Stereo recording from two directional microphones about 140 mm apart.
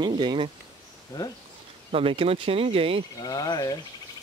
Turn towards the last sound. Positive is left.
turn(degrees=30)  # may be behind; listen again after turning